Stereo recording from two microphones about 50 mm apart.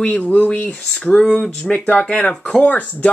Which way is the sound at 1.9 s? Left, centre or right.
Left.